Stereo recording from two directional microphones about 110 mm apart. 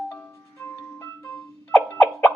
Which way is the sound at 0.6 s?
25° left (ahead or behind).